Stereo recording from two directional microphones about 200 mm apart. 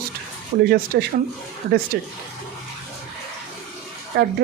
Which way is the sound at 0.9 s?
55° right (ahead or behind).